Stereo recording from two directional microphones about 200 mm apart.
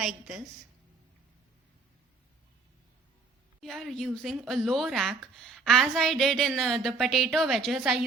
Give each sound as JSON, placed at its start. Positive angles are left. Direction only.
{"t": 0.0, "sound": "a woman's voice", "side_deg": 0}
{"t": 3.6, "sound": "speech", "side_deg": 0}